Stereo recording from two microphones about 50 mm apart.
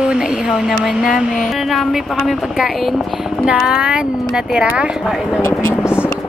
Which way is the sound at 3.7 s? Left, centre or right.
Centre.